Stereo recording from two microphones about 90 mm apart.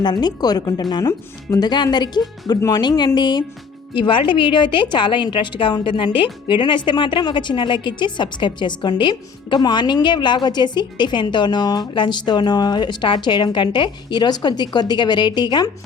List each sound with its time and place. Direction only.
0.0 s speech: 55° left (ahead or behind)
2.6 s speech: 35° left (ahead or behind)
2.8 s a woman's voice: 55° left (ahead or behind)
3.9 s a woman's voice: 65° left (ahead or behind)